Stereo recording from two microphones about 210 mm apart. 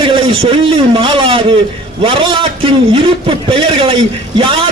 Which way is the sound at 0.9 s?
25° right (ahead or behind).